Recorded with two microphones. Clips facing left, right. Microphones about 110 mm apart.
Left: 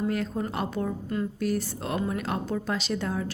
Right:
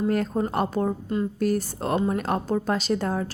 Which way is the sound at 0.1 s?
45° right (ahead or behind).